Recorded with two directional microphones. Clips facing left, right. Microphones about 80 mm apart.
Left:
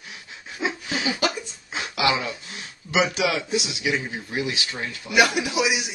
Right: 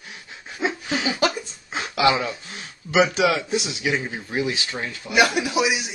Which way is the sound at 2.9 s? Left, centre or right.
Right.